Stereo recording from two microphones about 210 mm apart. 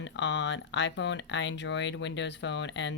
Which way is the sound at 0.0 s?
60° left (ahead or behind).